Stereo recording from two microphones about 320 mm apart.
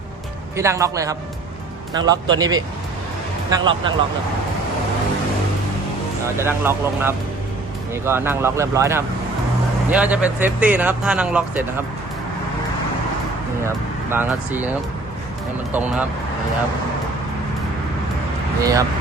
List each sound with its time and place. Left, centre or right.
0.5 s speech: centre
6.2 s speech: centre
14.1 s speech: centre
18.6 s speech: centre